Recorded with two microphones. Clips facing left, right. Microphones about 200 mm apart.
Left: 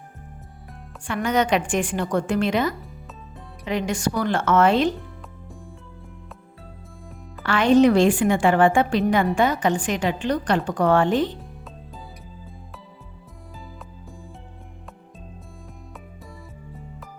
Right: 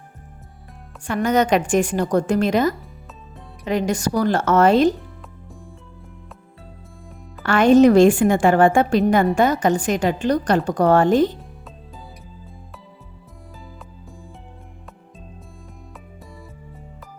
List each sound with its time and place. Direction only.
1.0 s a woman's voice: 40° right (ahead or behind)
7.4 s a woman's voice: 45° right (ahead or behind)